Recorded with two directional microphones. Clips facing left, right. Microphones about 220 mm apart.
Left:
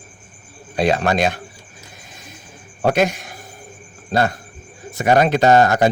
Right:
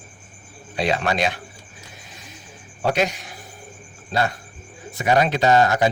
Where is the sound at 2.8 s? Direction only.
50° left (ahead or behind).